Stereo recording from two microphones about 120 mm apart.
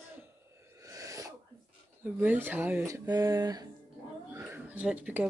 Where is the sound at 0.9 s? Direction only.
30° right (ahead or behind).